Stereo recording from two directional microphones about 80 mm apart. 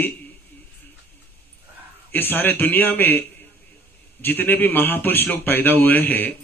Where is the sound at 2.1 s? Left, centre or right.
Left.